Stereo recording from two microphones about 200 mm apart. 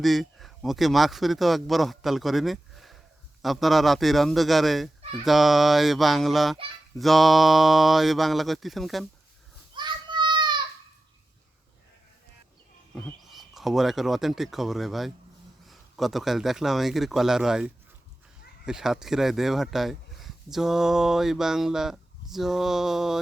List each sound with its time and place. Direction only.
0.0 s speech: centre (ahead or behind)
9.7 s children playing: 20° right (ahead or behind)
12.9 s speech: 5° left (ahead or behind)